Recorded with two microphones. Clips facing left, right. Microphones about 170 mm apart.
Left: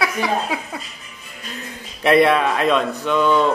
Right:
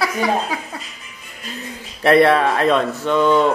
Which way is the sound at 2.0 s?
15° left (ahead or behind).